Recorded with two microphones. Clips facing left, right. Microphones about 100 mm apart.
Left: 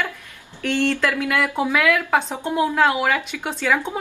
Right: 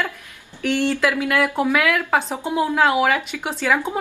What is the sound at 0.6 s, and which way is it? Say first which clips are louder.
A woman's voice: right 1 dB; 5° right (ahead or behind).